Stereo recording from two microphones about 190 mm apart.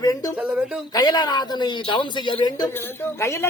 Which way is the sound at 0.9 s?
20° left (ahead or behind).